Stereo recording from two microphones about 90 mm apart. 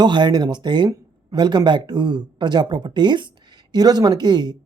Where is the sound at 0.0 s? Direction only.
55° right (ahead or behind).